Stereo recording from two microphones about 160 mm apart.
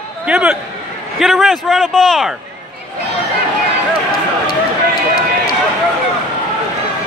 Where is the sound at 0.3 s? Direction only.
5° right (ahead or behind).